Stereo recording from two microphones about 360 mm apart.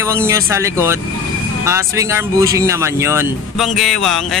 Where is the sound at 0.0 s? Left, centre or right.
Centre.